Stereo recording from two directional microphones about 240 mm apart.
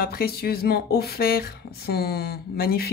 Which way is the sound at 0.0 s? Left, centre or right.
Left.